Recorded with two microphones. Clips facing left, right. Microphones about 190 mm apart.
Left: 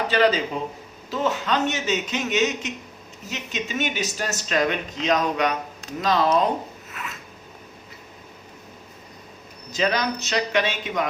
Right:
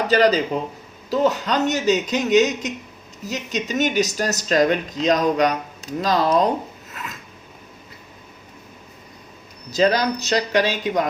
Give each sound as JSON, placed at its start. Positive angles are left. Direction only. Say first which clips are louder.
{"t": 0.1, "sound": "speech", "louder": "right 4 dB", "side_deg": -40}
{"t": 6.9, "sound": "filing", "louder": "right 2 dB", "side_deg": -35}
{"t": 9.7, "sound": "speech", "louder": "right 5 dB", "side_deg": -35}